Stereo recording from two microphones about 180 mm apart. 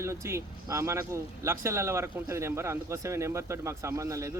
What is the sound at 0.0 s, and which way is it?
A man's voice, 15° right (ahead or behind).